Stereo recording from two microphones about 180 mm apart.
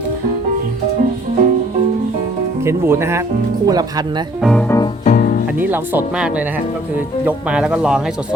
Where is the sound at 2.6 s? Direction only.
15° right (ahead or behind).